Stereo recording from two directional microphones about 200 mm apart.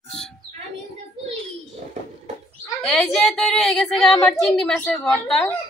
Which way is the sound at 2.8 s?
Centre (ahead or behind).